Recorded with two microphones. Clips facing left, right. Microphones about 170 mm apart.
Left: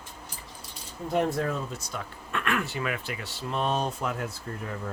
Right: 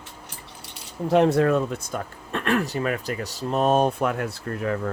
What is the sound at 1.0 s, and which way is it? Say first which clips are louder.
Speech: right 8 dB; 85° right.